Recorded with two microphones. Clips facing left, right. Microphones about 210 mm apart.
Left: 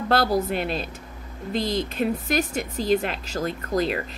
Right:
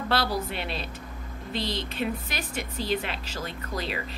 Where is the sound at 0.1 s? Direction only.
45° left (ahead or behind).